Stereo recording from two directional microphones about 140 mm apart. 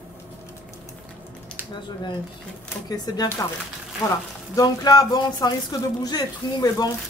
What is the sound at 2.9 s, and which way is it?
Speech, 30° left (ahead or behind).